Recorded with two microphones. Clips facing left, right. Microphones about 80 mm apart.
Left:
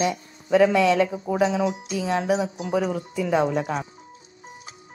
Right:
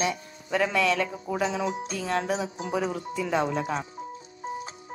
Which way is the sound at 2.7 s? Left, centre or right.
Centre.